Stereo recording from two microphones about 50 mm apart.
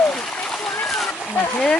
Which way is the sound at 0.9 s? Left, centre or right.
Centre.